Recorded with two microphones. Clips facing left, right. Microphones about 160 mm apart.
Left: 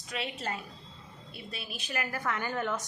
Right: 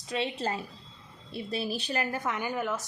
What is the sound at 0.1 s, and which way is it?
A woman's voice, 30° right (ahead or behind).